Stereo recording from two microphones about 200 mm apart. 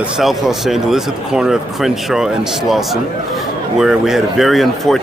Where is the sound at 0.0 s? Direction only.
Centre (ahead or behind).